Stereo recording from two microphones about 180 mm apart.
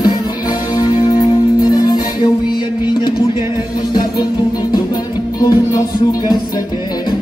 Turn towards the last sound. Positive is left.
turn(degrees=20)  # may be behind; listen again after turning